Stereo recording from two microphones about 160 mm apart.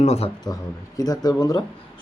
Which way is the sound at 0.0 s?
40° left (ahead or behind).